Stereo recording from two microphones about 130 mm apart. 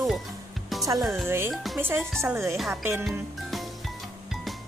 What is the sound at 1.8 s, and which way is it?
A woman's voice, 15° right (ahead or behind).